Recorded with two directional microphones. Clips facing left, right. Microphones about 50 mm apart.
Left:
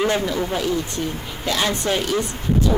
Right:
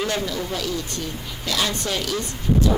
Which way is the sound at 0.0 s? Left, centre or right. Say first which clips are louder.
Left 5 dB; left.